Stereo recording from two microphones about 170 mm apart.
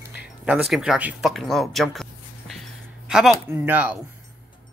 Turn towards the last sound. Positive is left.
turn(degrees=-10)  # may be behind; listen again after turning